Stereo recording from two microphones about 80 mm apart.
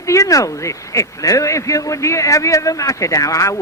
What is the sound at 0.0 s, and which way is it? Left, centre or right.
A man's voice, left.